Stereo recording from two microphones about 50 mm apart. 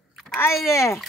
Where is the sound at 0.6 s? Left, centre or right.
Left.